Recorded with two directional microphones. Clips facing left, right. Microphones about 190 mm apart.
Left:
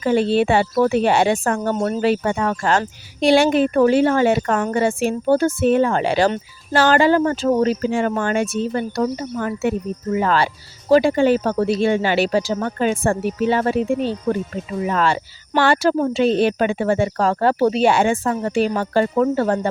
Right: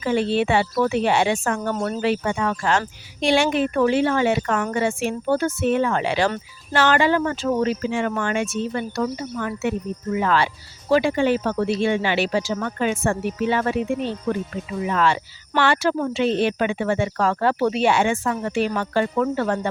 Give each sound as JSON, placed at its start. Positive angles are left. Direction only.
{"t": 0.0, "sound": "speech", "side_deg": 40}